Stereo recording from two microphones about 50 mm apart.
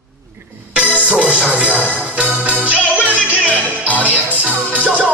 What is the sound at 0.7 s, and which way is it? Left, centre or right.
Music, right.